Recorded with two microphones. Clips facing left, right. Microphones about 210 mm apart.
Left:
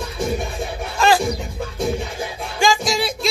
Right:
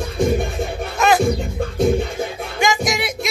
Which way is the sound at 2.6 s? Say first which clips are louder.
Left 1 dB; 20° right (ahead or behind).